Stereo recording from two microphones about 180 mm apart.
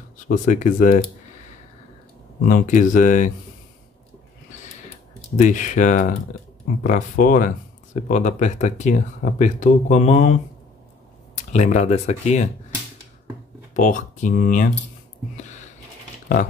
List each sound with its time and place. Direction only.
0.3 s speech: 45° left (ahead or behind)
2.4 s speech: 50° left (ahead or behind)
5.3 s speech: 45° left (ahead or behind)
11.3 s speech: 40° left (ahead or behind)
13.7 s speech: 45° left (ahead or behind)
15.3 s a sound: 40° left (ahead or behind)